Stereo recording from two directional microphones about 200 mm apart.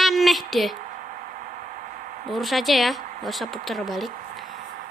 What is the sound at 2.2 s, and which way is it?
Speech, centre (ahead or behind).